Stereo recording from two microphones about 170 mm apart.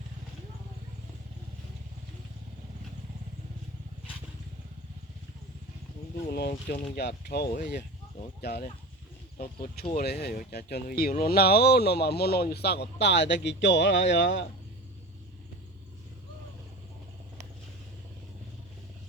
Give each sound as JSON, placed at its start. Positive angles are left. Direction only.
{"t": 6.5, "sound": "speech", "side_deg": 55}
{"t": 9.9, "sound": "speech", "side_deg": 65}